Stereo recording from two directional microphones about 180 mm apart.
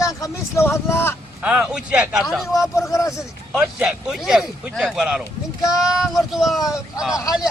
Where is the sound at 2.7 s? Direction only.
15° left (ahead or behind).